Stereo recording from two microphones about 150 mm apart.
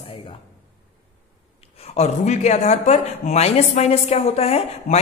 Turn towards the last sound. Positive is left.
turn(degrees=45)  # may be behind; listen again after turning